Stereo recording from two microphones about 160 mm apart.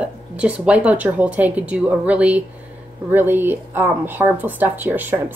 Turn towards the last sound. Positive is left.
turn(degrees=-10)  # may be behind; listen again after turning